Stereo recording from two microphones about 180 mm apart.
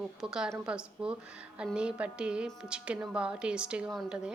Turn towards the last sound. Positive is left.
turn(degrees=0)  # may be behind; listen again after turning